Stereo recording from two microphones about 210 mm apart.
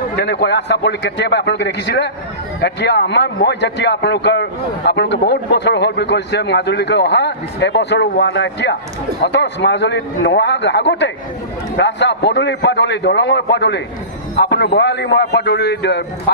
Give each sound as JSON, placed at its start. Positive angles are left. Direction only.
{"t": 0.2, "sound": "a man's voice", "side_deg": 55}